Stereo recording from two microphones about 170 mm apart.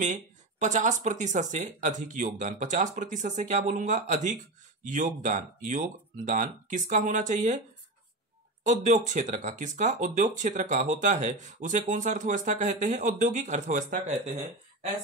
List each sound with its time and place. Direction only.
0.0 s speech: 45° right (ahead or behind)
8.6 s speech: 45° right (ahead or behind)